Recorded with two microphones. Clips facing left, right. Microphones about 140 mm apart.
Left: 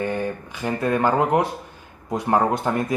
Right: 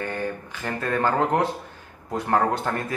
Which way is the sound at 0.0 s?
15° left (ahead or behind).